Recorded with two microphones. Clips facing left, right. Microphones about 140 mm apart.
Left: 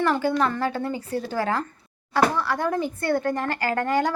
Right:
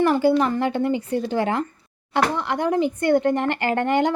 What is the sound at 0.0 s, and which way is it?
A woman's voice, 15° right (ahead or behind).